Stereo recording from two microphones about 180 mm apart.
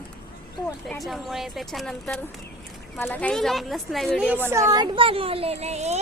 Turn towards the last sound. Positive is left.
turn(degrees=-40)  # may be behind; listen again after turning